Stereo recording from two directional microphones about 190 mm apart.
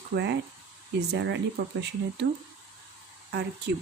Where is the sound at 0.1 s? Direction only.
65° right (ahead or behind).